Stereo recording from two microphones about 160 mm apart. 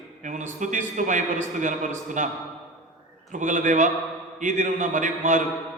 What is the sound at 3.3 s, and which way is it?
A man's voice, 50° right (ahead or behind).